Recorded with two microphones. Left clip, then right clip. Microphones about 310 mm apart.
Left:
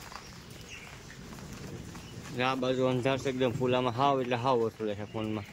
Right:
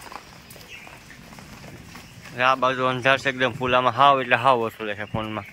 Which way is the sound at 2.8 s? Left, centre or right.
Right.